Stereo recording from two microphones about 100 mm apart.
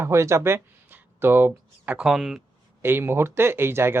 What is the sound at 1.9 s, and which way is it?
Speech, 5° right (ahead or behind).